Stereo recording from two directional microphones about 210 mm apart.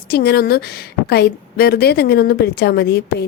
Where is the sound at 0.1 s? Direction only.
50° left (ahead or behind).